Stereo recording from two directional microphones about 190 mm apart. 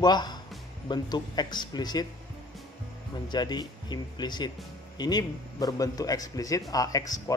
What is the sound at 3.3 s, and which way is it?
Speech, 20° left (ahead or behind).